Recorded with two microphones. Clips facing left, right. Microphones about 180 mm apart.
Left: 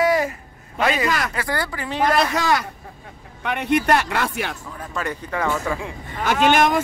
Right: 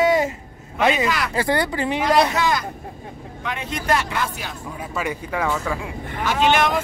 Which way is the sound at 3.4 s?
65° left (ahead or behind).